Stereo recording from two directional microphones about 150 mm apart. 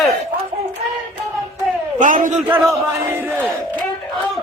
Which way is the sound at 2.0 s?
60° right (ahead or behind).